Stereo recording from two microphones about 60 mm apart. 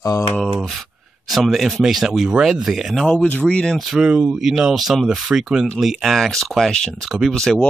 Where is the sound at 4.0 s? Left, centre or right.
Centre.